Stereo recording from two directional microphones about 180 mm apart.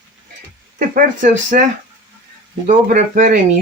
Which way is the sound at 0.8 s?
45° right (ahead or behind).